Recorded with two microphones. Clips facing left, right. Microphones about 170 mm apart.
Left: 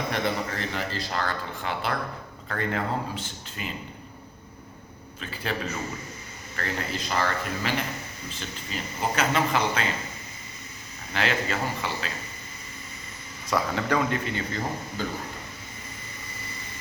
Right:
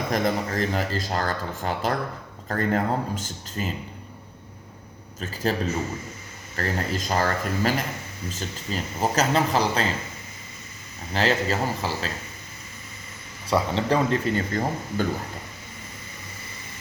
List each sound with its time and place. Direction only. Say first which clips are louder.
0.1 s speech: right 4 dB; 40° right (ahead or behind)
5.2 s speech: right 6 dB; 40° right (ahead or behind)
6.6 s speech: right 4 dB; 40° right (ahead or behind)
11.1 s speech: right 4 dB; 35° right (ahead or behind)
13.5 s speech: right 3 dB; 30° right (ahead or behind)
14.3 s speech: right 5 dB; 50° right (ahead or behind)